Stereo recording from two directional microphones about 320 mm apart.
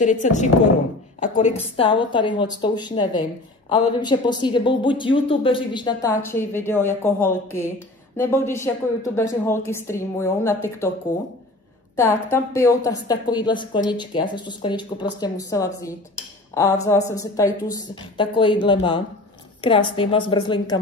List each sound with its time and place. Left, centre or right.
0.0 s a woman's voice: left
12.3 s speech: centre